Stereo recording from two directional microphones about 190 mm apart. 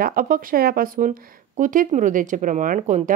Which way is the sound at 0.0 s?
45° right (ahead or behind).